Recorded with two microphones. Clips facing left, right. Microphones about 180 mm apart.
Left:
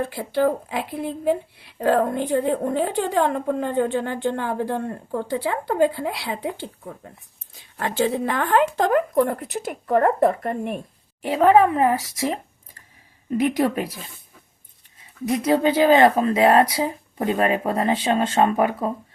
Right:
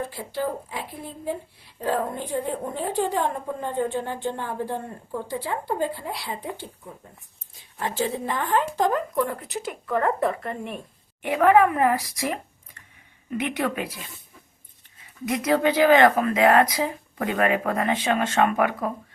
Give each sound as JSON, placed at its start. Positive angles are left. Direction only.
{"t": 0.3, "sound": "speech", "side_deg": 70}
{"t": 7.8, "sound": "speech", "side_deg": 70}
{"t": 11.2, "sound": "speech", "side_deg": 30}
{"t": 15.4, "sound": "speech", "side_deg": 25}